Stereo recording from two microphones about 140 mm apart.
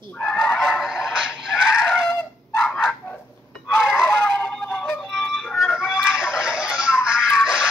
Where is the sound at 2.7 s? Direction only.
10° left (ahead or behind).